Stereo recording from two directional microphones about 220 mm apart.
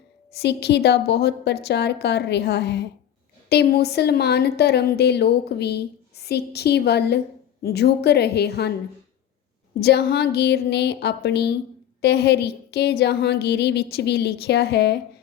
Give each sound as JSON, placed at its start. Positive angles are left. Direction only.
{"t": 0.3, "sound": "a woman's voice", "side_deg": 50}
{"t": 9.8, "sound": "a woman's voice", "side_deg": 45}